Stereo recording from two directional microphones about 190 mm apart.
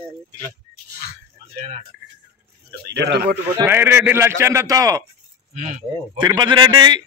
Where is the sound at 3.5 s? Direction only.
10° right (ahead or behind).